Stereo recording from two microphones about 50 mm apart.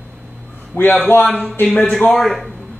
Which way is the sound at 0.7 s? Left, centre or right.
Left.